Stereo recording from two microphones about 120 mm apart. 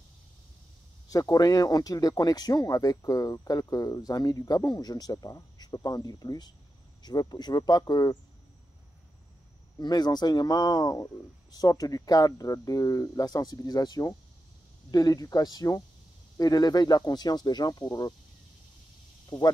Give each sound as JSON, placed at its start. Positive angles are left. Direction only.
{"t": 1.0, "sound": "speech", "side_deg": 30}
{"t": 9.8, "sound": "speech", "side_deg": 35}
{"t": 19.2, "sound": "speech", "side_deg": 35}